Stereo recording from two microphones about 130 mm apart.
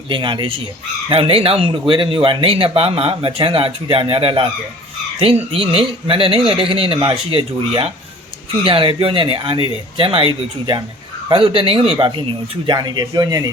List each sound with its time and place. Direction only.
0.1 s speech: 40° right (ahead or behind)